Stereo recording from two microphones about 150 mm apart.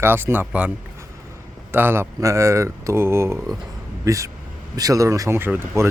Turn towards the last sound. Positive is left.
turn(degrees=-15)  # may be behind; listen again after turning